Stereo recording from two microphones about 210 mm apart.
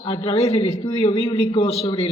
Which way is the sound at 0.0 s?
25° left (ahead or behind).